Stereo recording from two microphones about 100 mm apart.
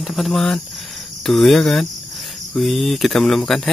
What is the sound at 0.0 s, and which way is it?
Speech, centre (ahead or behind).